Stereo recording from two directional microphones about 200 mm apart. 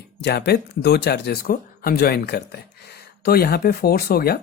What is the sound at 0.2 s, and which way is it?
Speech, 55° left (ahead or behind).